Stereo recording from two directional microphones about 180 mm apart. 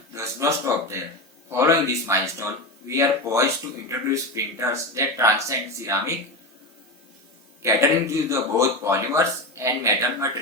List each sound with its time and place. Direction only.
0.1 s speech: 15° right (ahead or behind)
7.6 s speech: 15° right (ahead or behind)